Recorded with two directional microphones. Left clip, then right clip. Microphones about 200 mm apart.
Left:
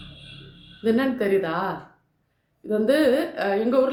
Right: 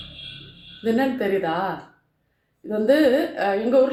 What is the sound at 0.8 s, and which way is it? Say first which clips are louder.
Speech: even; 10° left (ahead or behind).